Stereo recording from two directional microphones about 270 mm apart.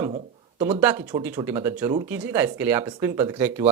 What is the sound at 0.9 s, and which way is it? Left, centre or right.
Speech, centre.